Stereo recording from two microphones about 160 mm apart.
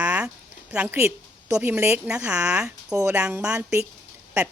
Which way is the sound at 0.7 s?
10° right (ahead or behind).